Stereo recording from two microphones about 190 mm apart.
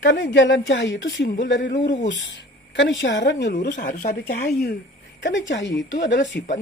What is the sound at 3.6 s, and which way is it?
Speech, 55° left (ahead or behind).